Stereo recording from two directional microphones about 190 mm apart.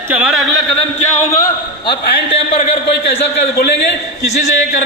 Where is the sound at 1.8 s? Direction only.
30° left (ahead or behind).